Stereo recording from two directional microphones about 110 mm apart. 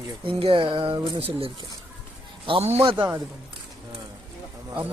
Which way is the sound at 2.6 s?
75° right (ahead or behind).